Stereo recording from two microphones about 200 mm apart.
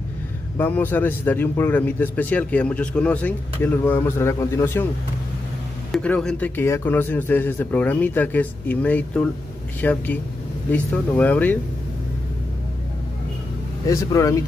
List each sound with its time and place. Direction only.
0.6 s a man's voice: 10° left (ahead or behind)
5.9 s a man's voice: 5° left (ahead or behind)
13.8 s a man's voice: 15° left (ahead or behind)